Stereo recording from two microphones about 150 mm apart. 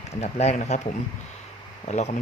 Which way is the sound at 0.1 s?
45° left (ahead or behind).